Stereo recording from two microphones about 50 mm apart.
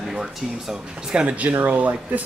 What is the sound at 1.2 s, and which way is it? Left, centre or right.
Speech, right.